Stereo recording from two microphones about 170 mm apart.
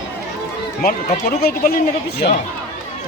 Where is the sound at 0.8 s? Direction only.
65° left (ahead or behind).